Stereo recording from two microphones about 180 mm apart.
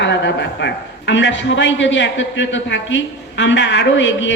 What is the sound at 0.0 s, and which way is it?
A man's voice, 85° left.